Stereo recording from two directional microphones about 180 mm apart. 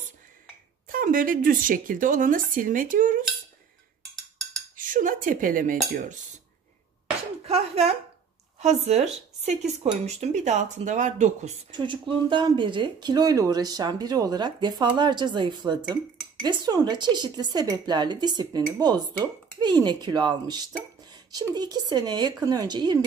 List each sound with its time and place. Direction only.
0.8 s a woman's voice: 50° right (ahead or behind)
4.7 s cutlery: 50° right (ahead or behind)
7.4 s a sound: 35° right (ahead or behind)
8.5 s speech: 40° right (ahead or behind)
11.7 s speech: 25° right (ahead or behind)